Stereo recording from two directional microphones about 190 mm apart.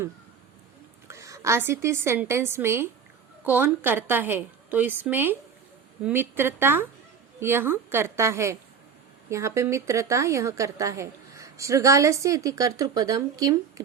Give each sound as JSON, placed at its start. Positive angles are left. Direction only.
{"t": 1.0, "sound": "a woman's voice", "side_deg": -15}